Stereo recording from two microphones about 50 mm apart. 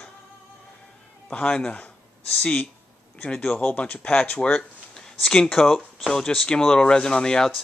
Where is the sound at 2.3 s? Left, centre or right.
Left.